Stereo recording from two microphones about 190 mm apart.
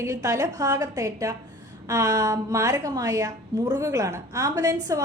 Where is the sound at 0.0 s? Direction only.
15° right (ahead or behind).